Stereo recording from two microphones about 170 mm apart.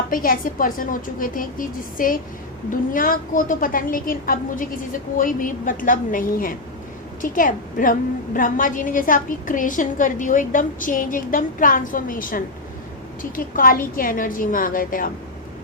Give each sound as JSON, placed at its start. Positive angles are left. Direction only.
{"t": 0.1, "sound": "a woman's voice", "side_deg": 55}